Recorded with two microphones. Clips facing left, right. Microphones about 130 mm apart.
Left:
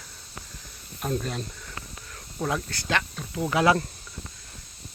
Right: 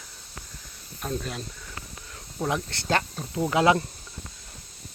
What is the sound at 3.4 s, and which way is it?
Speech, 20° right (ahead or behind).